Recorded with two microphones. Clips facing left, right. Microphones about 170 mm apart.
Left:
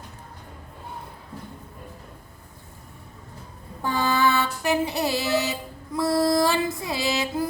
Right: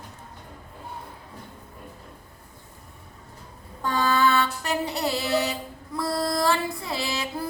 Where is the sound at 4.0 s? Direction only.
20° left (ahead or behind).